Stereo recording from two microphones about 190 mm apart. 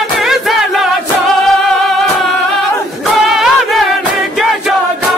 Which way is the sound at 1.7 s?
Centre (ahead or behind).